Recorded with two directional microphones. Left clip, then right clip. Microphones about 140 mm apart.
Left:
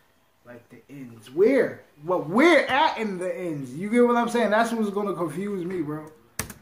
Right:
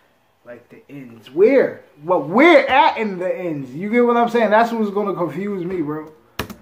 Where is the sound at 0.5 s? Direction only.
10° right (ahead or behind).